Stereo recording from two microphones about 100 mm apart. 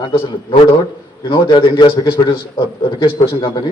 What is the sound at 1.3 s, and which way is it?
A man's voice, 50° left (ahead or behind).